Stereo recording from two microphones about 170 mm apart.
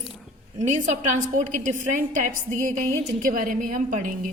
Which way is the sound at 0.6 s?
45° right (ahead or behind).